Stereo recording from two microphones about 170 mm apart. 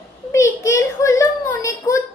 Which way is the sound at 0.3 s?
15° left (ahead or behind).